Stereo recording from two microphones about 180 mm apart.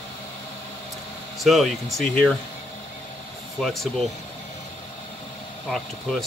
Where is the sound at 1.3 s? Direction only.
Centre (ahead or behind).